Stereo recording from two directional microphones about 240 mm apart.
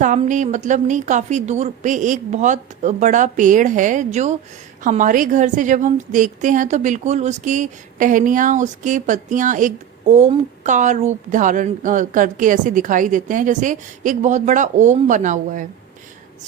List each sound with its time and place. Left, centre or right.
0.0 s a woman's voice: right